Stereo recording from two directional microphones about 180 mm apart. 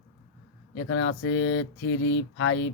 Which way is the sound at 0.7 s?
90° left.